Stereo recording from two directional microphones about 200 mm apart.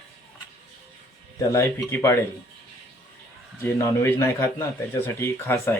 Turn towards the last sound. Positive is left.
turn(degrees=10)  # may be behind; listen again after turning